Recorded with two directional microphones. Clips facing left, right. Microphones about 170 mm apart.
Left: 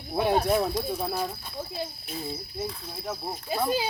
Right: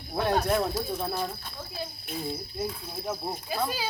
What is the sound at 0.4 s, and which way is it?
Speech, 10° left (ahead or behind).